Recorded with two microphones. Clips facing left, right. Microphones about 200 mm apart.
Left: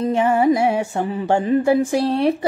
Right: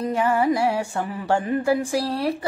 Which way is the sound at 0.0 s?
25° left (ahead or behind).